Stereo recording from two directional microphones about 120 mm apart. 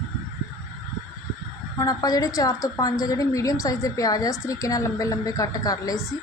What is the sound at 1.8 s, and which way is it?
A woman's voice, 30° left (ahead or behind).